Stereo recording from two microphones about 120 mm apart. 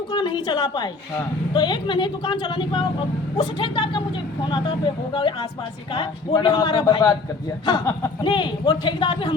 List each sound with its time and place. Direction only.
0.1 s speech: 45° left (ahead or behind)
5.1 s a man's voice: 45° left (ahead or behind)
8.2 s a man's voice: 40° left (ahead or behind)